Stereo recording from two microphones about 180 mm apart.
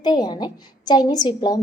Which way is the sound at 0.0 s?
25° left (ahead or behind).